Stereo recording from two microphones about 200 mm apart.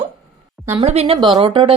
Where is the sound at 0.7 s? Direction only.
30° right (ahead or behind).